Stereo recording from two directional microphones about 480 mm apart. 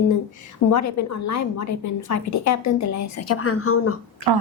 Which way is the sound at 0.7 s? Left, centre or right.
Left.